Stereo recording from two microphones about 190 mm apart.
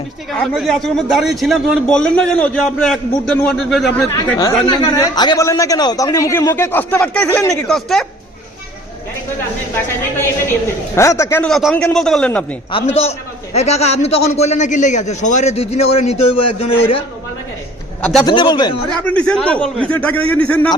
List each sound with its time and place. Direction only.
0.3 s a man's voice: centre (ahead or behind)
4.1 s speech: 15° left (ahead or behind)
9.7 s speech: 10° left (ahead or behind)
12.7 s a man's voice: 35° left (ahead or behind)
18.0 s speech: 5° left (ahead or behind)
18.3 s speech: 25° left (ahead or behind)
19.1 s a man's voice: 5° left (ahead or behind)